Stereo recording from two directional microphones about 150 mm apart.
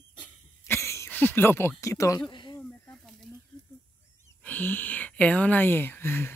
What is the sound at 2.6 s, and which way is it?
Snake, 5° left (ahead or behind).